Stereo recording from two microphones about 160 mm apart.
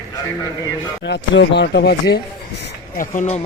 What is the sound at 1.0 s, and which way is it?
Speech, 90° left.